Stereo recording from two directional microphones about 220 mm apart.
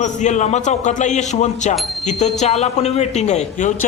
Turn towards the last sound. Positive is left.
turn(degrees=35)  # may be behind; listen again after turning